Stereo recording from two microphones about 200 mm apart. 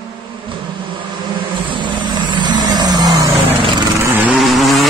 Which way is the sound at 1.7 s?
25° right (ahead or behind).